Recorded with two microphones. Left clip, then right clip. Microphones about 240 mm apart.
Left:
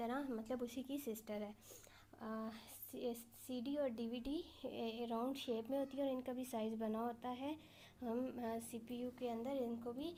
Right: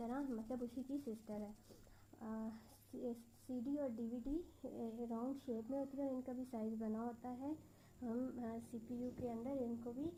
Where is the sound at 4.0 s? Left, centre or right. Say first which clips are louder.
Left 1 dB; left.